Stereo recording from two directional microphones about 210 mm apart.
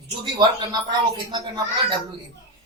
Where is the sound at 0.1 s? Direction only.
20° right (ahead or behind).